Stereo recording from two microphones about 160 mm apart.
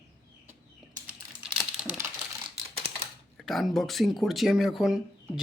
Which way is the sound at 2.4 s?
40° right (ahead or behind).